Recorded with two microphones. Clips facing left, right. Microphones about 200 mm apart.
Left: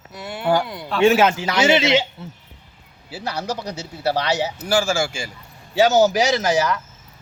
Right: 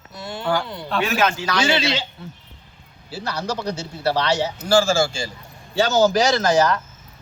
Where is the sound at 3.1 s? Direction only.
15° left (ahead or behind).